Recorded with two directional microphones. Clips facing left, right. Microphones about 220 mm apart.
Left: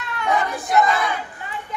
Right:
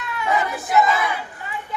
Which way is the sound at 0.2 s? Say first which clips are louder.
Left 1 dB; 5° right (ahead or behind).